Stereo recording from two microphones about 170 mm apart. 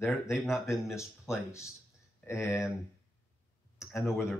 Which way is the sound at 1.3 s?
15° left (ahead or behind).